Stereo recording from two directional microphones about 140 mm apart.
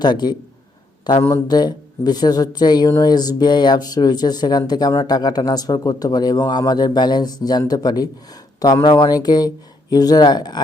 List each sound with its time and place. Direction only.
0.0 s a man's voice: 30° left (ahead or behind)